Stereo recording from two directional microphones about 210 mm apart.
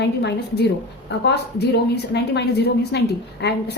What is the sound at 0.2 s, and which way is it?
A woman's voice, 50° left (ahead or behind).